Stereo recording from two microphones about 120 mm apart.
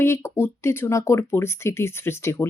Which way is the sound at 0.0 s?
20° left (ahead or behind).